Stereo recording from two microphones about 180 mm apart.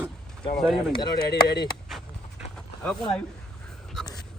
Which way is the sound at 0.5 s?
Centre (ahead or behind).